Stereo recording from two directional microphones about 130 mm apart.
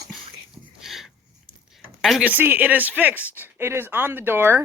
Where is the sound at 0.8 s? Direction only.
Centre (ahead or behind).